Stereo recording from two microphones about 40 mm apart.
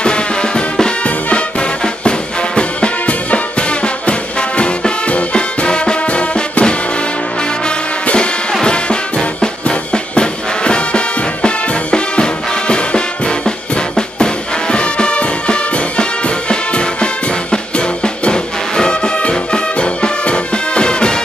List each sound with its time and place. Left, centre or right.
0.0 s music: left
8.6 s music: left